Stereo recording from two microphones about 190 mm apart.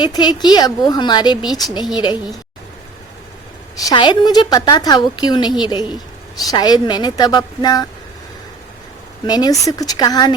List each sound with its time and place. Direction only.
0.0 s a woman's voice: 25° left (ahead or behind)
3.8 s a woman's voice: 25° left (ahead or behind)
9.2 s a woman's voice: 20° left (ahead or behind)